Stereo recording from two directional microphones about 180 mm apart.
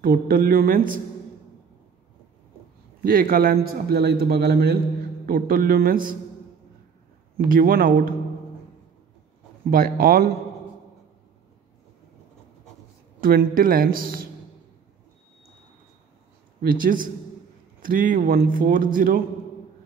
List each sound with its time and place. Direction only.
0.0 s speech: 55° right (ahead or behind)
3.0 s a man's voice: 55° right (ahead or behind)
7.3 s speech: 50° right (ahead or behind)
9.7 s a man's voice: 55° right (ahead or behind)
13.2 s speech: 55° right (ahead or behind)
16.6 s speech: 50° right (ahead or behind)